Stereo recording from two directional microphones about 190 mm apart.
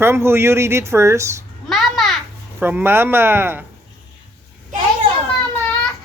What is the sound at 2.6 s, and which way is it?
Speech, 10° right (ahead or behind).